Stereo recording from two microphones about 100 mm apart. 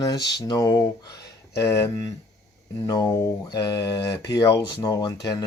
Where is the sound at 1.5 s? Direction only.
30° left (ahead or behind).